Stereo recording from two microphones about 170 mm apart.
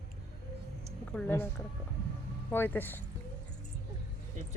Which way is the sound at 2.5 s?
10° left (ahead or behind).